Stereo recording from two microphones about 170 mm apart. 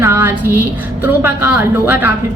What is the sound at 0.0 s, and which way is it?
Music, 15° right (ahead or behind).